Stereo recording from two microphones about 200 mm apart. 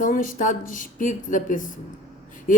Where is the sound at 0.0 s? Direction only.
40° left (ahead or behind).